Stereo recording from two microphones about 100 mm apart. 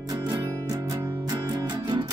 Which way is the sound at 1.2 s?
40° right (ahead or behind).